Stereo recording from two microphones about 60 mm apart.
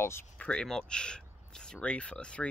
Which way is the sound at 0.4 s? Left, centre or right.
Centre.